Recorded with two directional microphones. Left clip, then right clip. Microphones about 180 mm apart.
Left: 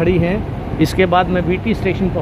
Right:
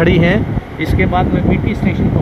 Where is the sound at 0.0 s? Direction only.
5° left (ahead or behind).